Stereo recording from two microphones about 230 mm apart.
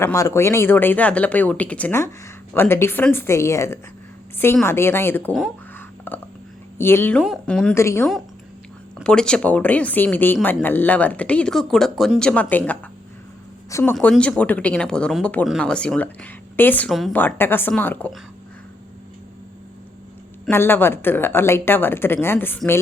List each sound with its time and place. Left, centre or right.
0.0 s a woman's voice: centre
20.4 s a woman's voice: centre